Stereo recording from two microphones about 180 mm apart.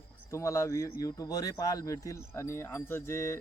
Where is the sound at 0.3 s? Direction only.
15° left (ahead or behind).